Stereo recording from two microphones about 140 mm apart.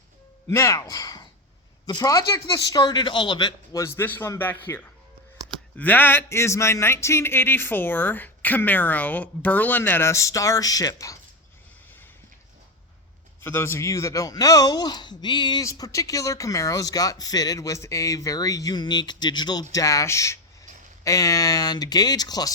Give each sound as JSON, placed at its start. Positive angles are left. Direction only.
{"t": 0.4, "sound": "speech", "side_deg": 20}
{"t": 13.4, "sound": "speech", "side_deg": 15}